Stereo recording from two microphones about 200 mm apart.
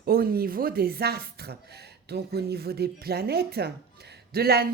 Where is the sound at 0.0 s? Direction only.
50° right (ahead or behind).